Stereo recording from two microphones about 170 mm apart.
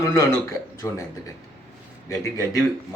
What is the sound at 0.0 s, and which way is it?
Speech, 20° left (ahead or behind).